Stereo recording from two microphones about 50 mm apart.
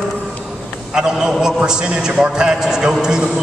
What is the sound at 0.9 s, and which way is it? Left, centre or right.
A man's voice, centre.